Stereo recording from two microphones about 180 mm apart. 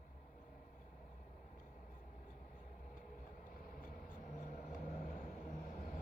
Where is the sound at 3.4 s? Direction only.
50° left (ahead or behind).